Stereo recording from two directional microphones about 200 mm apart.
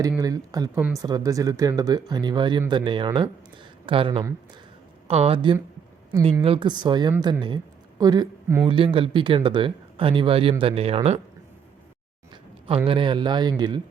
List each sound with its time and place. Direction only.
0.2 s speech: 20° right (ahead or behind)
12.3 s speech: 25° right (ahead or behind)